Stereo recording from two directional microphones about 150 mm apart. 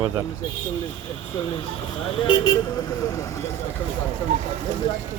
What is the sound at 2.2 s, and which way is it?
Speech, 25° left (ahead or behind).